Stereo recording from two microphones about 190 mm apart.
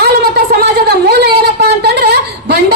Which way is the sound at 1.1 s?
55° right (ahead or behind).